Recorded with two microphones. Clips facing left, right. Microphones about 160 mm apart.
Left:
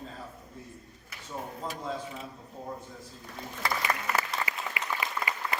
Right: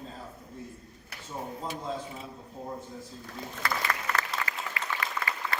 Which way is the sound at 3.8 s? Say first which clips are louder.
Left 1 dB; 15° left (ahead or behind).